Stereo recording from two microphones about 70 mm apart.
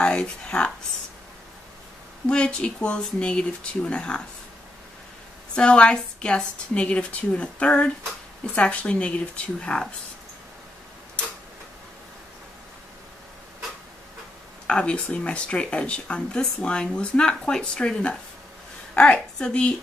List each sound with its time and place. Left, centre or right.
0.0 s speech: centre
2.2 s speech: centre
5.5 s speech: centre
14.7 s speech: centre